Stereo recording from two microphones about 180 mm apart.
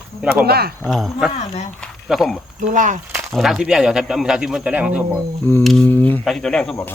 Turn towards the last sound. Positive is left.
turn(degrees=10)  # may be behind; listen again after turning